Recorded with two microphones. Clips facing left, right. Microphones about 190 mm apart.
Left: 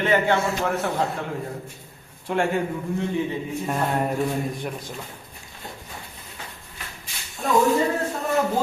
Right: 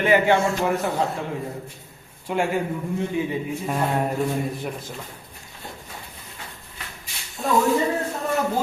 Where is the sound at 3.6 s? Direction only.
Centre (ahead or behind).